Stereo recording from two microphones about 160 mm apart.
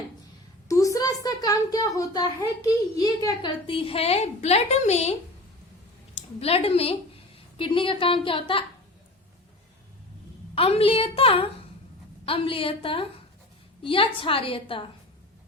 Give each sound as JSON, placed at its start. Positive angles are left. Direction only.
{"t": 0.7, "sound": "a woman's voice", "side_deg": 20}
{"t": 6.1, "sound": "a woman's voice", "side_deg": 40}
{"t": 10.5, "sound": "a woman's voice", "side_deg": 35}